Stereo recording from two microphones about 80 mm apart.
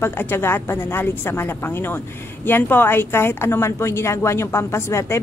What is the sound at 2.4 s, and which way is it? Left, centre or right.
A woman's voice, left.